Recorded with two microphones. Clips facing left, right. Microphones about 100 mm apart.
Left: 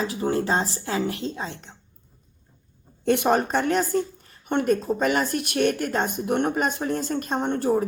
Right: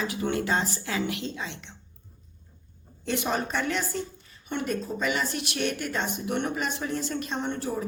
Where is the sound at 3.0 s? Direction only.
55° left (ahead or behind).